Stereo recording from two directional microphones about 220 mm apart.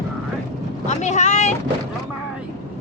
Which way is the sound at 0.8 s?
30° left (ahead or behind).